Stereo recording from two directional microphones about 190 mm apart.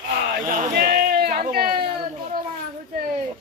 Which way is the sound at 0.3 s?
50° right (ahead or behind).